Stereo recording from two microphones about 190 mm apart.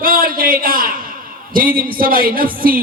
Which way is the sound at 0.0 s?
50° right (ahead or behind).